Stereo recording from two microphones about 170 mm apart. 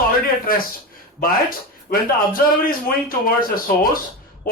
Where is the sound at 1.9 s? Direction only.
60° left (ahead or behind).